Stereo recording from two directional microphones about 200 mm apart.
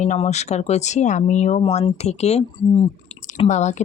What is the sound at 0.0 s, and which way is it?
Speech, 35° left (ahead or behind).